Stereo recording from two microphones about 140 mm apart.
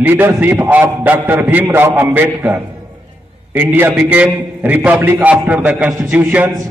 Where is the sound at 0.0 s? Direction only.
10° right (ahead or behind).